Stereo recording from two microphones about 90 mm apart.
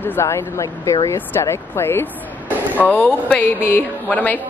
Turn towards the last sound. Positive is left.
turn(degrees=15)  # may be behind; listen again after turning